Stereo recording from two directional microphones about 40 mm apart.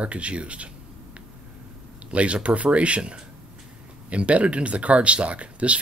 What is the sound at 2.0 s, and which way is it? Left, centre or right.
Speech, right.